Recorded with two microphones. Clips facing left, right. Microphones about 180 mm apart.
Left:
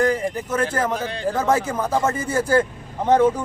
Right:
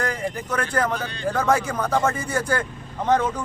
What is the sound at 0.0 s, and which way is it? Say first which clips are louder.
Speech: left 6 dB; 25° left (ahead or behind).